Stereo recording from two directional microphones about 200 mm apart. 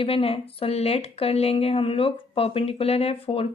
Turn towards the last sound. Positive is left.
turn(degrees=30)  # may be behind; listen again after turning